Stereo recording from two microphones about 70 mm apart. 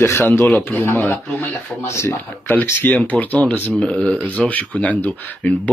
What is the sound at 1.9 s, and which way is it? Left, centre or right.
Speech, left.